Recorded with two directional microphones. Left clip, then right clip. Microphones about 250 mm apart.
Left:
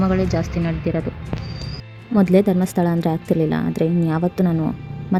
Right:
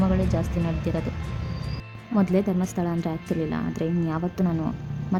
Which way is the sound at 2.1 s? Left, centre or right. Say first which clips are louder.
Left 8 dB; left.